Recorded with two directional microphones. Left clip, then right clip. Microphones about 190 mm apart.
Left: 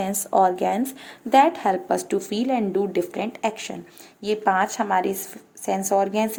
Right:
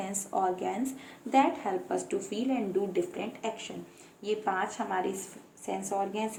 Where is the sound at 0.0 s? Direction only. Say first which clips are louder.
Left 11 dB; 40° left (ahead or behind).